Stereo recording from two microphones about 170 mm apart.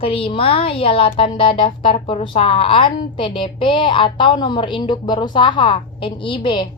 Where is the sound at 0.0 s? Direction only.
35° left (ahead or behind).